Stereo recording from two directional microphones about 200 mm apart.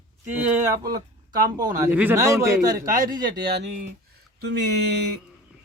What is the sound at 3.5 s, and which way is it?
A man's voice, 60° right (ahead or behind).